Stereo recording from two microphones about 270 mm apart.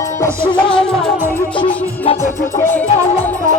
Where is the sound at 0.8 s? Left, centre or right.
Centre.